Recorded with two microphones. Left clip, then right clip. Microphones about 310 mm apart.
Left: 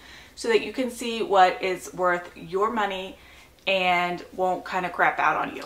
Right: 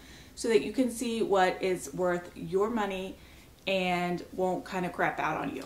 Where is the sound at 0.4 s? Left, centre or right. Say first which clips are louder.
Left 3 dB; centre.